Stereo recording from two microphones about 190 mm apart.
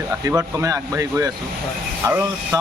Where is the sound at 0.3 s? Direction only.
15° right (ahead or behind).